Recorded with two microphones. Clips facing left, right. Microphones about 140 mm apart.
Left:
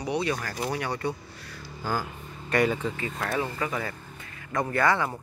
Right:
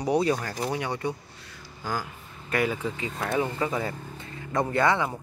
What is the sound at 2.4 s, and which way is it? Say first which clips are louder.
Speech: left 2 dB; 5° right (ahead or behind).